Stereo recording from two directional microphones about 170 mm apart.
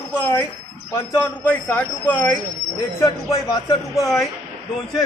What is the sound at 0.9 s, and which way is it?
A man's voice, 15° left (ahead or behind).